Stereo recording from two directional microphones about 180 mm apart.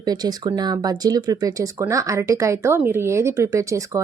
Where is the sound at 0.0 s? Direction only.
20° right (ahead or behind).